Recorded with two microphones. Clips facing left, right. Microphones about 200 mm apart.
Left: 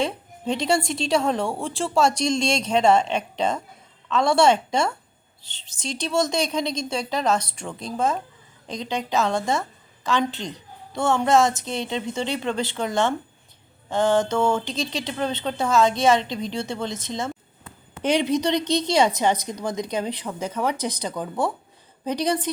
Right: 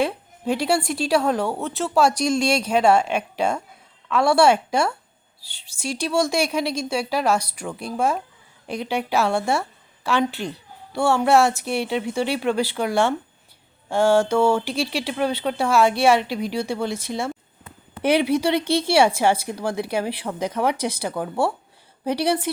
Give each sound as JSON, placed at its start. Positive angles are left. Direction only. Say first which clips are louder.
{"t": 0.0, "sound": "speech", "louder": "right 2 dB", "side_deg": -5}
{"t": 5.4, "sound": "speech", "louder": "left 1 dB", "side_deg": 20}
{"t": 6.1, "sound": "a woman's voice", "louder": "right 1 dB", "side_deg": -10}